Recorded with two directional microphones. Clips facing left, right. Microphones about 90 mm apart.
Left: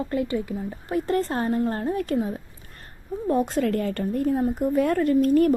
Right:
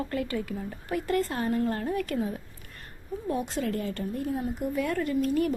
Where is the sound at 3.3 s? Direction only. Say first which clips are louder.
Left 7 dB; 45° left (ahead or behind).